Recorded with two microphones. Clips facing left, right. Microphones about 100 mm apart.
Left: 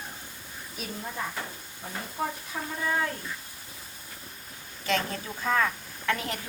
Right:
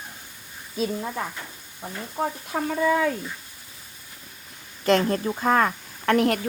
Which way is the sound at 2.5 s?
75° right (ahead or behind).